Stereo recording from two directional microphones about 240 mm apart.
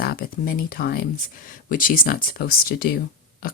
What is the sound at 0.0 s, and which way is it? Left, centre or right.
Speech, left.